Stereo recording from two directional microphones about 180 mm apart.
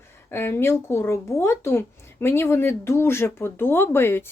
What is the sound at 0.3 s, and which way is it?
Speech, 15° left (ahead or behind).